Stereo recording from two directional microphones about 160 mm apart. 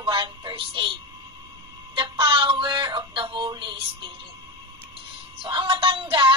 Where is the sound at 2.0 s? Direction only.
30° right (ahead or behind).